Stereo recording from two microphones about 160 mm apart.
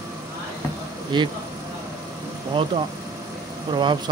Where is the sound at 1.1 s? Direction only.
30° right (ahead or behind).